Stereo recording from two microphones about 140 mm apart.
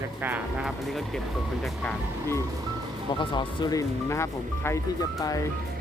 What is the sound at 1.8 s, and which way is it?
Speech, 15° left (ahead or behind).